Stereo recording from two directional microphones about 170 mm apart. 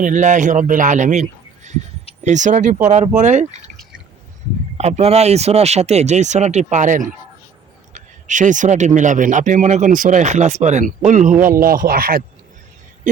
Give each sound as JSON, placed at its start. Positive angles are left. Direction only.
{"t": 0.0, "sound": "a man's voice", "side_deg": -45}
{"t": 4.8, "sound": "speech", "side_deg": -40}